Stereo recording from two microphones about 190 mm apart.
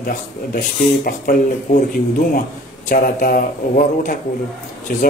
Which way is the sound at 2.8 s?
45° left (ahead or behind).